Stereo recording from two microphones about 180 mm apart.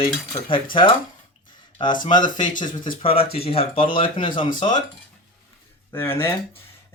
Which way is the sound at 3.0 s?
30° left (ahead or behind).